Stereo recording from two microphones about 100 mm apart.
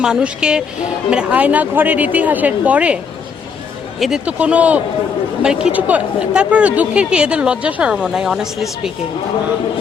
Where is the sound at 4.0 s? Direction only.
10° right (ahead or behind).